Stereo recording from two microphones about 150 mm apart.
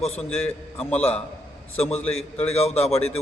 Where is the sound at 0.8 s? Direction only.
10° left (ahead or behind).